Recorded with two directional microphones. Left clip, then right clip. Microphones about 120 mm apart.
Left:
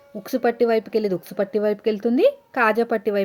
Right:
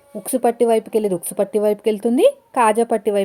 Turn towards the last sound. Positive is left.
turn(degrees=-20)  # may be behind; listen again after turning